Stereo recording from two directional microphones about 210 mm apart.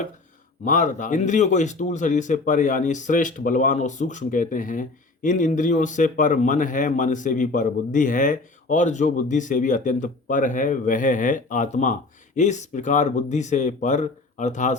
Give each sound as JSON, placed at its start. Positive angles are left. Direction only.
{"t": 0.6, "sound": "speech", "side_deg": 35}